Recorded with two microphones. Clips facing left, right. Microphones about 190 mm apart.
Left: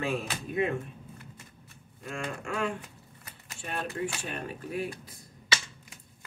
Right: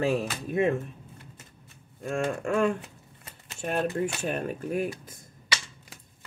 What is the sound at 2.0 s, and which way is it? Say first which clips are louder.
Speech: right 8 dB; 50° right (ahead or behind).